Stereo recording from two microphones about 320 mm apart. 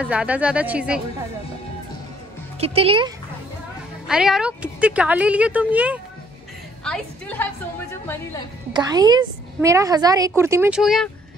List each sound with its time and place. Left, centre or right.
0.0 s speech: centre
2.6 s a woman's voice: centre
4.1 s speech: centre
8.7 s a woman's voice: centre